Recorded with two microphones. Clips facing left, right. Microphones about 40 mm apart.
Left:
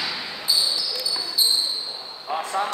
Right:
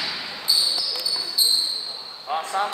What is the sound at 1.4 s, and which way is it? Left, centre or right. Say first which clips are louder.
Basketball bounce: left 1 dB; centre.